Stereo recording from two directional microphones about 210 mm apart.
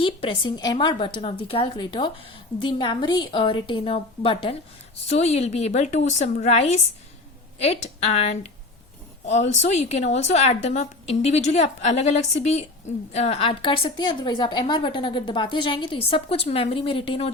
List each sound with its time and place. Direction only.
0.0 s a woman's voice: 25° left (ahead or behind)